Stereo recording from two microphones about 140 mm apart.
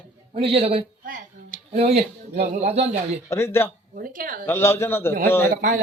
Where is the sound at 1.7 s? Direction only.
50° right (ahead or behind).